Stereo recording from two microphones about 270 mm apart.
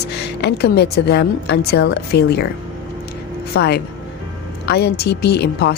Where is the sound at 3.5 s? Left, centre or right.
Left.